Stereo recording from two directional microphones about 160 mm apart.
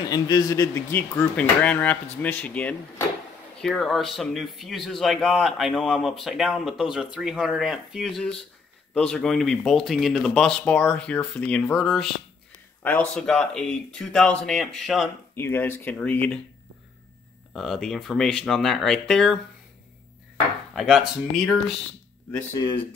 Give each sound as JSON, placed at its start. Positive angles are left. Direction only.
{"t": 0.1, "sound": "speech", "side_deg": 25}
{"t": 15.3, "sound": "speech", "side_deg": 15}
{"t": 17.5, "sound": "speech", "side_deg": 0}
{"t": 20.7, "sound": "speech", "side_deg": 0}